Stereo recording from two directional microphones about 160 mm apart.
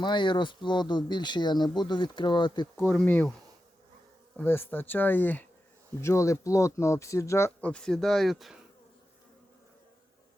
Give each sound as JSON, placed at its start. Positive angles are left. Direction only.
{"t": 0.0, "sound": "speech", "side_deg": 30}
{"t": 2.8, "sound": "speech", "side_deg": 10}
{"t": 4.4, "sound": "speech", "side_deg": 15}